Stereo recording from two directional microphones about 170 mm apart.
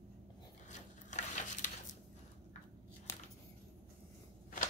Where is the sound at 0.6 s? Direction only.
45° left (ahead or behind).